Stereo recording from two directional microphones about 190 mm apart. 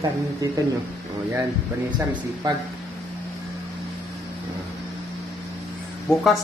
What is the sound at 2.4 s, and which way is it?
Speech, 20° right (ahead or behind).